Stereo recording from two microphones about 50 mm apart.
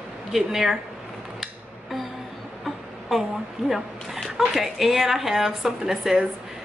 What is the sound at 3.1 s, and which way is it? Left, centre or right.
A woman's voice, centre.